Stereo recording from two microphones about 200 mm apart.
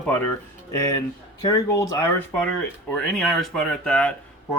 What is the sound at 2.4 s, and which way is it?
Speech, centre (ahead or behind).